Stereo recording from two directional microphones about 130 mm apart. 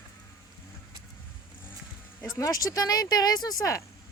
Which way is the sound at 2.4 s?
25° left (ahead or behind).